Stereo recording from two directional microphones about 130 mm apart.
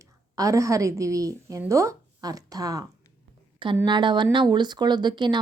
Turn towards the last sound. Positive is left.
turn(degrees=-35)  # may be behind; listen again after turning